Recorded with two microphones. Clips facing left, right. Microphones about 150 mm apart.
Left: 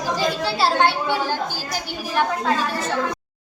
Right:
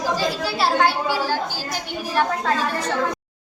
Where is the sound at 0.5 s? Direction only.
30° left (ahead or behind).